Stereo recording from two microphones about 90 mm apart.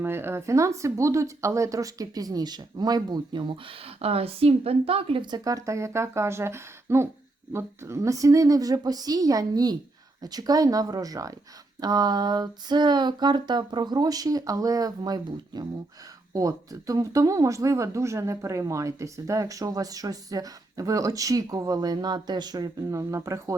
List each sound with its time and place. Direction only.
0.0 s speech: 25° right (ahead or behind); by 5.3 s 85° right
5.3 s speech: 40° right (ahead or behind)